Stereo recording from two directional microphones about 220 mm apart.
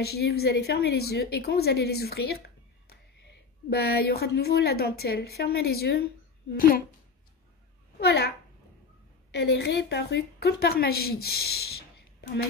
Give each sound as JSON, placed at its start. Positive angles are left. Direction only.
{"t": 0.0, "sound": "a woman's voice", "side_deg": 45}
{"t": 8.0, "sound": "a woman's voice", "side_deg": 50}
{"t": 9.3, "sound": "a woman's voice", "side_deg": 50}